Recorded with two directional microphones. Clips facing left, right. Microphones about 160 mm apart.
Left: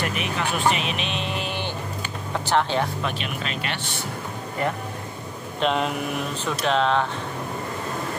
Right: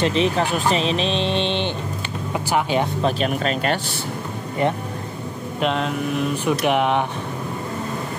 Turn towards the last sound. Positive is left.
turn(degrees=-15)  # may be behind; listen again after turning